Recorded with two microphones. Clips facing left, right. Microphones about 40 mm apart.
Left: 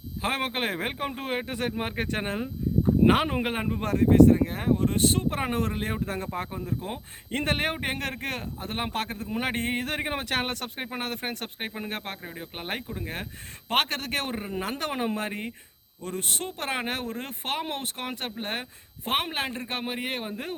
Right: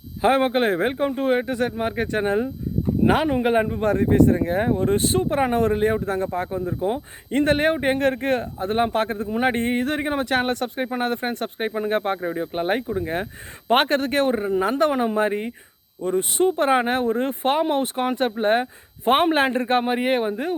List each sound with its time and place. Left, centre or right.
0.2 s speech: centre
3.9 s speech: centre
5.2 s speech: centre
19.1 s speech: right
19.8 s speech: centre
20.2 s speech: centre